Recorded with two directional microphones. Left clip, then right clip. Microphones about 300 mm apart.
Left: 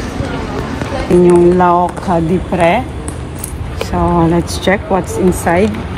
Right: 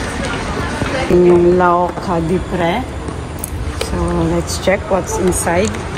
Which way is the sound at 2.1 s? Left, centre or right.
Left.